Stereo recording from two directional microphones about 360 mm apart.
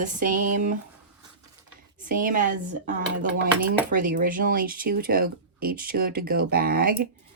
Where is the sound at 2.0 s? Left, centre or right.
Right.